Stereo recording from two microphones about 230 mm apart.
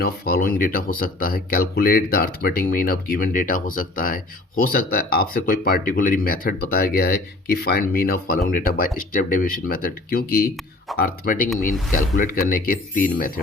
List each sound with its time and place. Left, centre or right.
0.0 s speech: left